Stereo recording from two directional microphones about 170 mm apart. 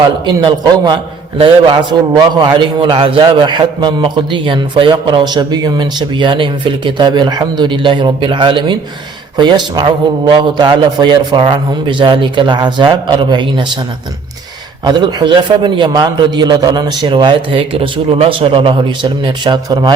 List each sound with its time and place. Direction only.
0.3 s a man's voice: 25° right (ahead or behind)
14.8 s a man's voice: 25° right (ahead or behind)